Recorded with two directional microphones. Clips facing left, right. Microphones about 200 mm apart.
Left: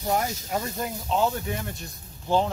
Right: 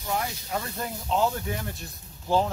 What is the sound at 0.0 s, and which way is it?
Speech, 40° left (ahead or behind).